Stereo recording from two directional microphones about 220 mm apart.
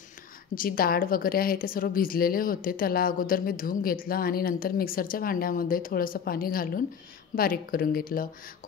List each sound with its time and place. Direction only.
0.6 s a woman's voice: 40° left (ahead or behind)